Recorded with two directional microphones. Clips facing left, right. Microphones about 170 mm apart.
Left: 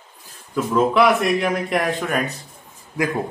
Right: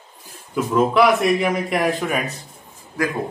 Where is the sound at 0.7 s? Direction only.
Centre (ahead or behind).